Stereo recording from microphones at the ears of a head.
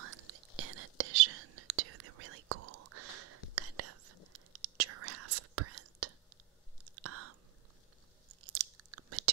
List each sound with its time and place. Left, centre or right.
0.0 s whispering: right
6.8 s chewing: right